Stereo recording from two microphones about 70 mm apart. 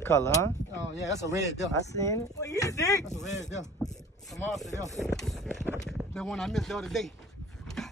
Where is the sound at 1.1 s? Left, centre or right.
Right.